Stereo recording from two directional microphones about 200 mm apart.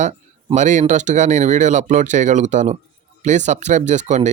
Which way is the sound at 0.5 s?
35° right (ahead or behind).